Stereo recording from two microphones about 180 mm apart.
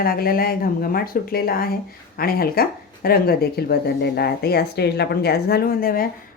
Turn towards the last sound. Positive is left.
turn(degrees=55)  # may be behind; listen again after turning